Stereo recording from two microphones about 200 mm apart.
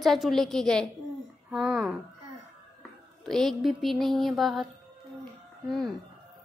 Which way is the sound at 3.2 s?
Centre (ahead or behind).